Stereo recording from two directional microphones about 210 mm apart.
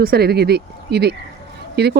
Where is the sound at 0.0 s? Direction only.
45° right (ahead or behind).